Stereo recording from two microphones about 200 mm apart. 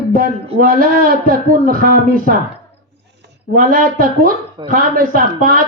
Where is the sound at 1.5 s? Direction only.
45° right (ahead or behind).